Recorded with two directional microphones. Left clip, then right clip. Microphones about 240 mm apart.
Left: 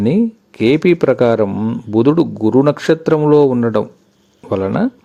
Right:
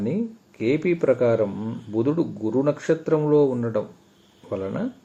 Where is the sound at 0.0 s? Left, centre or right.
Left.